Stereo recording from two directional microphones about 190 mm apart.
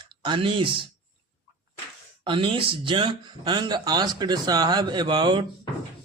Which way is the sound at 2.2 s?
25° right (ahead or behind).